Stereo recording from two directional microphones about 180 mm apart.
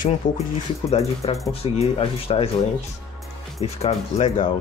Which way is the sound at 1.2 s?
35° left (ahead or behind).